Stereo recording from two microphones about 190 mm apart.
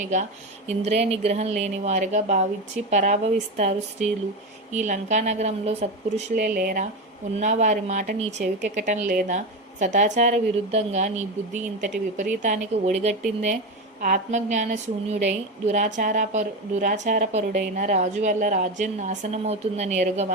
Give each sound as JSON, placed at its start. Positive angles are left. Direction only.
{"t": 0.1, "sound": "a woman's voice", "side_deg": -40}
{"t": 6.3, "sound": "a woman's voice", "side_deg": -50}